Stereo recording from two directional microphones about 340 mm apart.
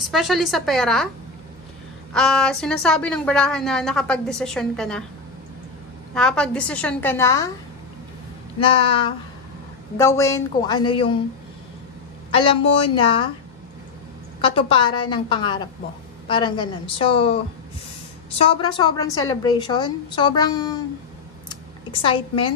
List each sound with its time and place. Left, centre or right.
0.0 s a woman's voice: centre
2.1 s a woman's voice: centre
6.1 s a woman's voice: centre
8.6 s a woman's voice: centre
12.3 s a man's voice: centre
14.4 s a woman's voice: centre
18.4 s a woman's voice: centre
21.5 s a sound: centre